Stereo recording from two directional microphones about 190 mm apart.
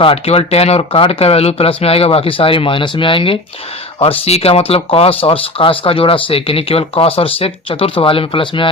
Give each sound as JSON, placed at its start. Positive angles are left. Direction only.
{"t": 0.0, "sound": "speech", "side_deg": 30}